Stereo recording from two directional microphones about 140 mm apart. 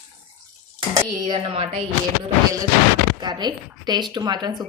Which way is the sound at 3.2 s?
30° right (ahead or behind).